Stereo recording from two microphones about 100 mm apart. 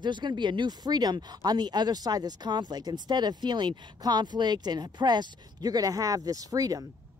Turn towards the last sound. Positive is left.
turn(degrees=-35)  # may be behind; listen again after turning